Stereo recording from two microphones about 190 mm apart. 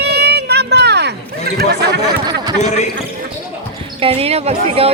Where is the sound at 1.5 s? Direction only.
60° right (ahead or behind).